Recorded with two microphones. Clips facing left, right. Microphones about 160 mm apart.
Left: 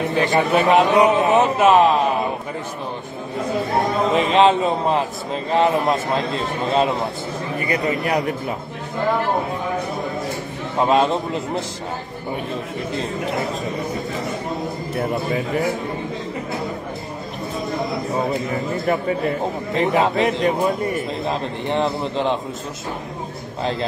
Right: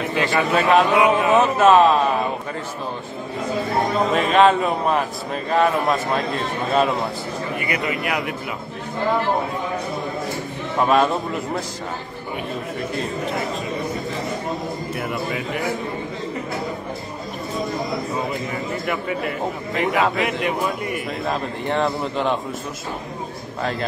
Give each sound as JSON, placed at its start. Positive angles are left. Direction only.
{"t": 0.1, "sound": "a man's voice", "side_deg": 20}
{"t": 4.1, "sound": "a man's voice", "side_deg": 25}
{"t": 7.5, "sound": "a man's voice", "side_deg": 40}
{"t": 10.8, "sound": "a man's voice", "side_deg": 25}
{"t": 15.0, "sound": "a man's voice", "side_deg": 35}
{"t": 18.5, "sound": "a man's voice", "side_deg": 35}
{"t": 21.6, "sound": "a man's voice", "side_deg": 20}
{"t": 23.6, "sound": "a man's voice", "side_deg": 25}